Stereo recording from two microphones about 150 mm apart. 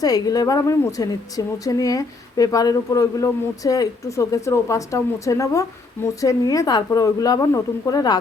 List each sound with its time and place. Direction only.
0.0 s speech: 25° left (ahead or behind)